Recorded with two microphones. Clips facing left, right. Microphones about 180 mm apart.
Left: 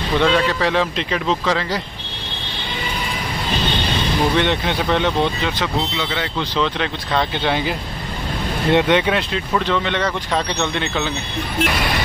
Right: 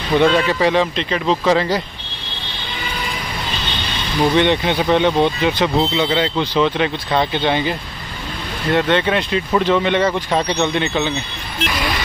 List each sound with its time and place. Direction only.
0.2 s speech: 5° right (ahead or behind)
1.4 s speech: 20° right (ahead or behind)
4.4 s speech: centre (ahead or behind)
5.6 s speech: 25° right (ahead or behind)
6.5 s speech: 10° right (ahead or behind)
7.4 s speech: 5° left (ahead or behind)
8.6 s speech: 15° left (ahead or behind)
9.5 s speech: 10° right (ahead or behind)